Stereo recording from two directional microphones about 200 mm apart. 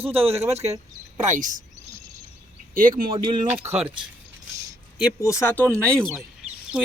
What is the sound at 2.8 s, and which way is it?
Speech, 45° right (ahead or behind).